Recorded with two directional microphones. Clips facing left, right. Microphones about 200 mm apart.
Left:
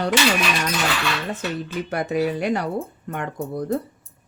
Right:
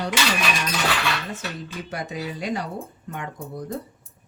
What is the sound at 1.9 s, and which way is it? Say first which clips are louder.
Dishes: left 9 dB; 60° left (ahead or behind).